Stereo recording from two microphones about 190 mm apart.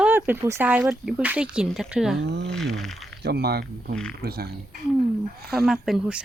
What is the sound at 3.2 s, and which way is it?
Speech, 55° right (ahead or behind).